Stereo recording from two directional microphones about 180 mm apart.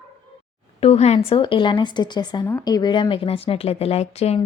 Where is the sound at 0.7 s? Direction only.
35° left (ahead or behind).